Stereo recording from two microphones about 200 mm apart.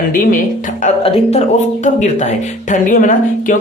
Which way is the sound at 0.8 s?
30° left (ahead or behind).